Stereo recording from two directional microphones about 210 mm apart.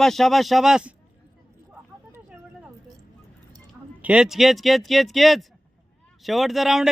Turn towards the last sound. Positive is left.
turn(degrees=0)  # may be behind; listen again after turning